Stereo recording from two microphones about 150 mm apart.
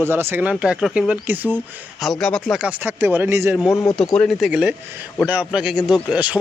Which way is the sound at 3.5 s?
5° right (ahead or behind).